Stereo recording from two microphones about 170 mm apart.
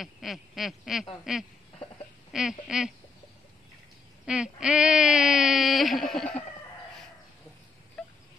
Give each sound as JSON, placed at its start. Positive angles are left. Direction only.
{"t": 0.0, "sound": "speech", "side_deg": 0}
{"t": 4.3, "sound": "speech", "side_deg": -5}
{"t": 8.0, "sound": "a sound", "side_deg": 5}